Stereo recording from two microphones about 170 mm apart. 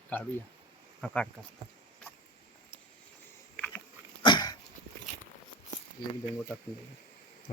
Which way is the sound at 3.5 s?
10° left (ahead or behind).